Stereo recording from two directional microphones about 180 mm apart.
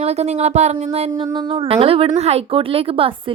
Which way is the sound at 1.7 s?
30° right (ahead or behind).